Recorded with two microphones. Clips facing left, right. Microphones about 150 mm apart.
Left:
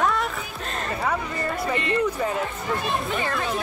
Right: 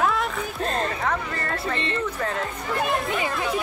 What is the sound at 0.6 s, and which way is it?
Speech, 35° right (ahead or behind).